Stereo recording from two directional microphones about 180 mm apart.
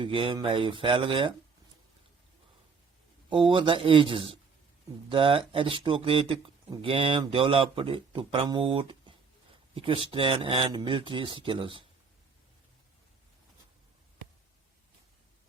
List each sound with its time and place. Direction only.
0.0 s speech: 30° right (ahead or behind)
3.2 s speech: 25° right (ahead or behind)